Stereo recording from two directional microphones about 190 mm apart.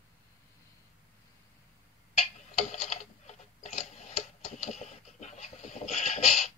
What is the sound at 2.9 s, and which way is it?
Mechanisms, 35° left (ahead or behind).